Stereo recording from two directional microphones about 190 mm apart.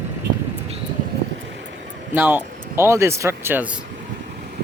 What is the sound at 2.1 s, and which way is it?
A man's voice, 10° right (ahead or behind).